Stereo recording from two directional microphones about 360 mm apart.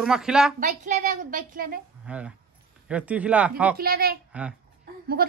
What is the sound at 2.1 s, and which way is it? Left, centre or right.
Speech, centre.